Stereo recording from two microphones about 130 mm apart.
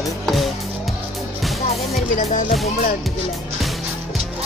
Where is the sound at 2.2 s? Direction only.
90° left.